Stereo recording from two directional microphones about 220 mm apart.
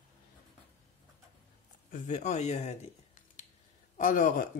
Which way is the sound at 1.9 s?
35° left (ahead or behind).